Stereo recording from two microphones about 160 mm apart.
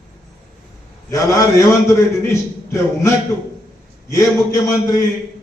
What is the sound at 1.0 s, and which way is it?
A man's voice, 20° left (ahead or behind).